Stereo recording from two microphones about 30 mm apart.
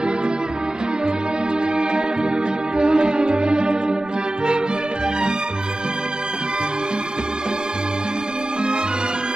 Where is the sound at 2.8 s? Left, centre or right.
Right.